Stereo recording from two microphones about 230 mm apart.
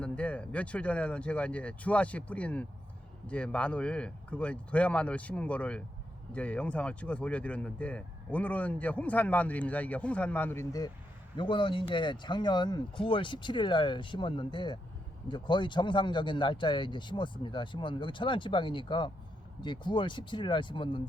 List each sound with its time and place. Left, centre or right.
0.0 s speech: centre; by 21.0 s left